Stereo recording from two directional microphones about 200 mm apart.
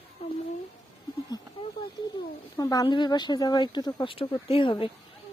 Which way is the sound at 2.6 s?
20° left (ahead or behind).